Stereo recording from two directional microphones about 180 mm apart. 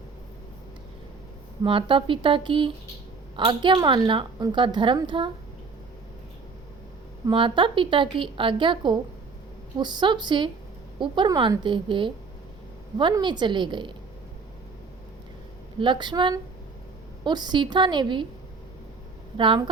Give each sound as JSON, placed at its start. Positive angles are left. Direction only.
{"t": 1.6, "sound": "a woman's voice", "side_deg": -30}
{"t": 7.3, "sound": "a woman's voice", "side_deg": -30}
{"t": 15.8, "sound": "a woman's voice", "side_deg": -25}
{"t": 19.4, "sound": "a woman's voice", "side_deg": -25}